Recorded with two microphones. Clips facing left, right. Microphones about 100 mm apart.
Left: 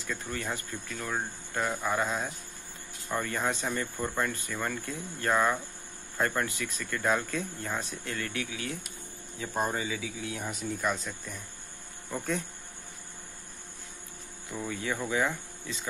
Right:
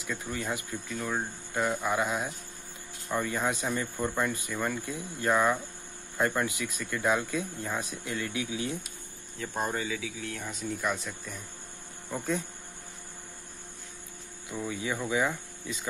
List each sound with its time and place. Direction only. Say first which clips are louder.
0.0 s speech: right 1 dB; 5° right (ahead or behind)
5.3 s speech: right 1 dB; centre (ahead or behind); by 8.7 s 20° right (ahead or behind)
9.4 s speech: left 1 dB; 5° left (ahead or behind)
14.7 s speech: right 1 dB; 5° right (ahead or behind)